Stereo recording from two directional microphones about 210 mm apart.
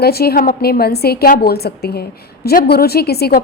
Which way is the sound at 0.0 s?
50° left (ahead or behind).